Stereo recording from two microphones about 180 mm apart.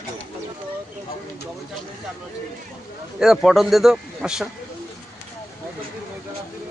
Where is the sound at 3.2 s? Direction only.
Centre (ahead or behind).